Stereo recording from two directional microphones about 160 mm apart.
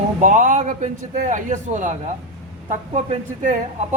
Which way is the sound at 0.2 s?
50° right (ahead or behind).